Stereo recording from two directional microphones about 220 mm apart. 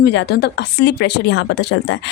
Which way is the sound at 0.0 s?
50° left (ahead or behind).